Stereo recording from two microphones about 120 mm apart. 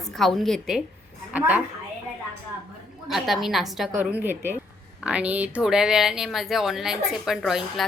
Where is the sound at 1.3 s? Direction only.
10° right (ahead or behind).